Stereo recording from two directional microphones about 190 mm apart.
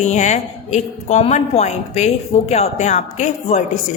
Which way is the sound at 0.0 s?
35° left (ahead or behind).